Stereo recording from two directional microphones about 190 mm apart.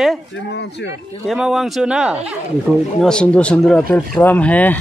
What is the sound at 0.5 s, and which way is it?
Speech, 65° left (ahead or behind).